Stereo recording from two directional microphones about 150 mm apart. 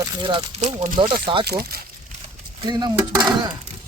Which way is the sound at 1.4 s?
90° right.